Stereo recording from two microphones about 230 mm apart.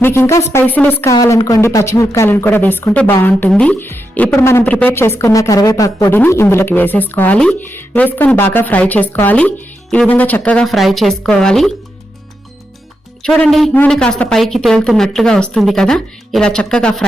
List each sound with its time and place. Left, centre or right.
0.0 s a woman's voice: centre
13.2 s a woman's voice: centre